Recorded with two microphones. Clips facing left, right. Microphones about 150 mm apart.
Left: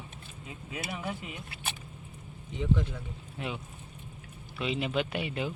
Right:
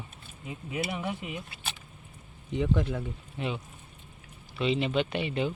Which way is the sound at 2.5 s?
60° right (ahead or behind).